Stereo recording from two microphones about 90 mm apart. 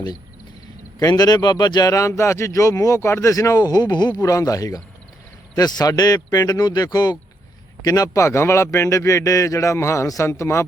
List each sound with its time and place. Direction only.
0.9 s speech: 45° left (ahead or behind)
1.9 s a man's voice: 35° left (ahead or behind); by 4.1 s 55° left (ahead or behind)
4.2 s a man's voice: 40° left (ahead or behind)